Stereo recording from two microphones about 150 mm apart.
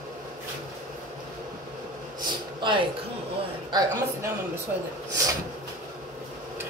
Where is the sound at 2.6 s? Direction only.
35° right (ahead or behind).